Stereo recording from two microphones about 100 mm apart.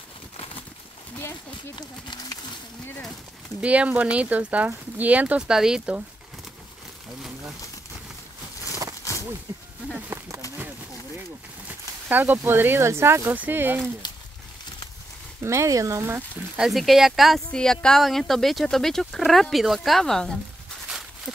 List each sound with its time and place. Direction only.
3.6 s speech: 15° right (ahead or behind)
9.1 s a sound: 35° left (ahead or behind)
9.5 s speech: 35° right (ahead or behind)
9.9 s a sound: 25° right (ahead or behind)
11.6 s speech: 20° right (ahead or behind)
15.4 s speech: 30° right (ahead or behind)
16.5 s speech: 5° right (ahead or behind)